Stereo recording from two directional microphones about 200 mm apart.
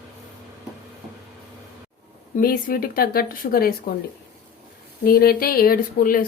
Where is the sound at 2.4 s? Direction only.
45° left (ahead or behind).